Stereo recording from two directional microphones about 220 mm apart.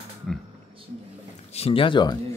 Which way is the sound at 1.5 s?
25° left (ahead or behind).